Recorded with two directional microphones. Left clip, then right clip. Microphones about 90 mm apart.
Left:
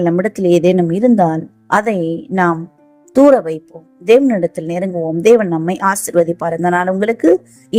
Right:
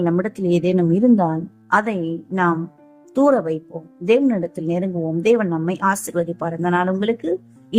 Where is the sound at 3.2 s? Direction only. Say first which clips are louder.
Left 6 dB; 30° left (ahead or behind).